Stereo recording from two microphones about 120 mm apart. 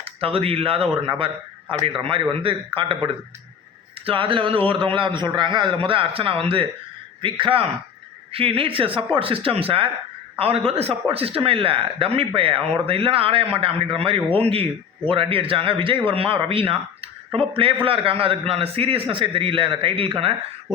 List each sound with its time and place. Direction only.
0.0 s speech: 50° right (ahead or behind)
2.4 s a man's voice: 45° right (ahead or behind)